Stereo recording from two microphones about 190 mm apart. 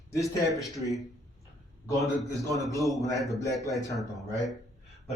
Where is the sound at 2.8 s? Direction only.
Centre (ahead or behind).